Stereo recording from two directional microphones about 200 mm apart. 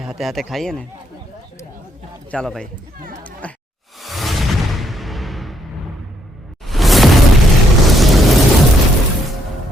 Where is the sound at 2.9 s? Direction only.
45° right (ahead or behind).